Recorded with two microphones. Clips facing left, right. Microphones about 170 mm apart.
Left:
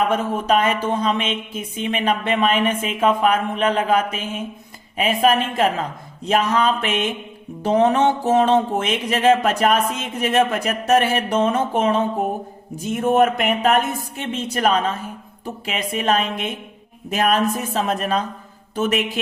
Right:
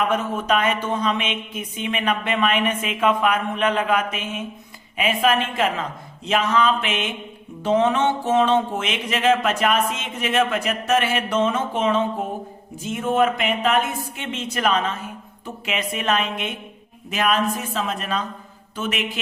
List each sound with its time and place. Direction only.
0.1 s speech: 35° left (ahead or behind)